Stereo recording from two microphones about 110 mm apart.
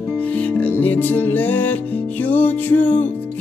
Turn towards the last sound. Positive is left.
turn(degrees=15)  # may be behind; listen again after turning